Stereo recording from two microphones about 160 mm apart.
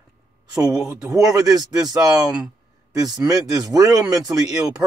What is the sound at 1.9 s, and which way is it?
Speech, 25° right (ahead or behind).